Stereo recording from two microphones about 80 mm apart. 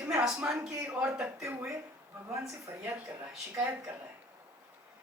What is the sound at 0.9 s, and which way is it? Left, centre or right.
Speech, centre.